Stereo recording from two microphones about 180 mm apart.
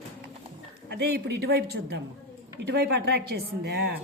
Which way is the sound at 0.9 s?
65° right (ahead or behind).